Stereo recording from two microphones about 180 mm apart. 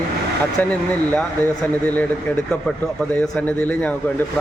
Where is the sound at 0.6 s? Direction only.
10° left (ahead or behind).